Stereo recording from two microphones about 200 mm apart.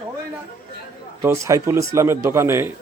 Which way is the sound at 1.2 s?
15° right (ahead or behind).